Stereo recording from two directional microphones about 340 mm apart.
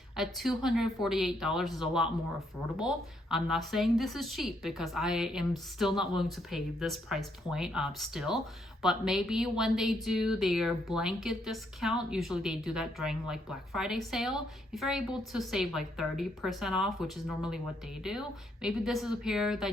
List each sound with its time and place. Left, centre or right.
0.2 s speech: centre